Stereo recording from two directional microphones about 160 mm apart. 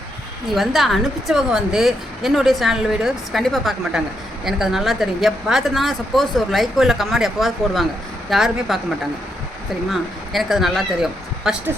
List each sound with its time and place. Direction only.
0.5 s a woman's voice: centre (ahead or behind)
9.9 s speech: centre (ahead or behind)